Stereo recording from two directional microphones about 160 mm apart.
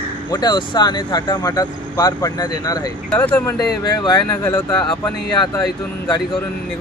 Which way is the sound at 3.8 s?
25° left (ahead or behind).